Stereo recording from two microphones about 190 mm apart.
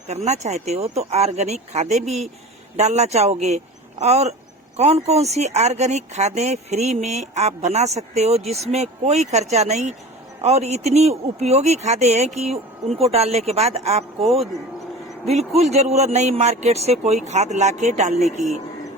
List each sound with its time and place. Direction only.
0.3 s speech: 35° right (ahead or behind)